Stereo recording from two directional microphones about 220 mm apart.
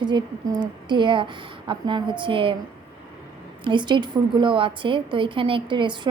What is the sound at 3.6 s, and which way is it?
A woman's voice, 20° right (ahead or behind).